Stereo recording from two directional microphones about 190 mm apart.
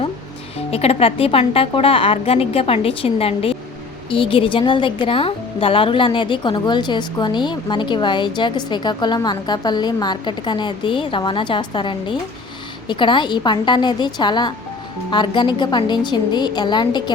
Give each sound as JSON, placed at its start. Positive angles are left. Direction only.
{"t": 0.7, "sound": "a woman's voice", "side_deg": 30}